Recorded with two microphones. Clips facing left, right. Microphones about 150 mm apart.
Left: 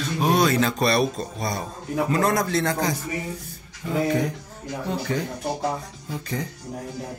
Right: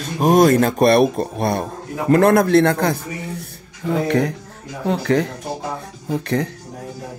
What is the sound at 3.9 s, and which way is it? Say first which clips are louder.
Music: right 4 dB; 75° right (ahead or behind).